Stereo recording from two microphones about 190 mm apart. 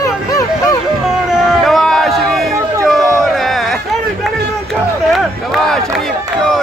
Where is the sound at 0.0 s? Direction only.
15° left (ahead or behind).